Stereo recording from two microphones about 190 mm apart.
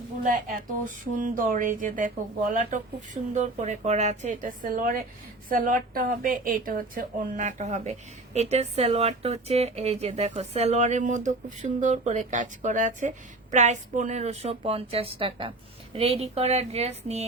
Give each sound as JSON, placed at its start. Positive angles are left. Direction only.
{"t": 0.3, "sound": "speech", "side_deg": -45}